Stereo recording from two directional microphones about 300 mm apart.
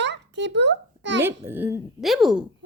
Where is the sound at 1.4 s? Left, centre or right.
Centre.